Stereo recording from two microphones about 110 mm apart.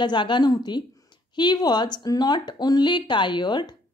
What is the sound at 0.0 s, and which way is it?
A woman's voice, 45° left (ahead or behind).